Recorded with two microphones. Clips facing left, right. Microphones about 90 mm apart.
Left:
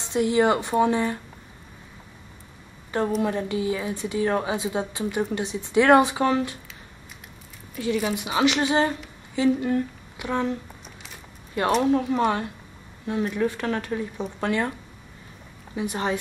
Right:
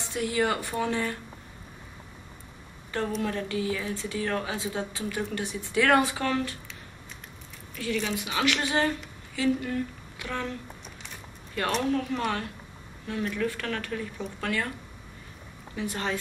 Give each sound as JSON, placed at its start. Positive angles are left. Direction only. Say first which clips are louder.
{"t": 0.0, "sound": "speech", "louder": "left 7 dB", "side_deg": 20}
{"t": 3.2, "sound": "speech", "louder": "left 5 dB", "side_deg": 20}
{"t": 7.7, "sound": "speech", "louder": "left 5 dB", "side_deg": 20}
{"t": 11.8, "sound": "speech", "louder": "left 6 dB", "side_deg": 20}
{"t": 15.7, "sound": "speech", "louder": "left 5 dB", "side_deg": 20}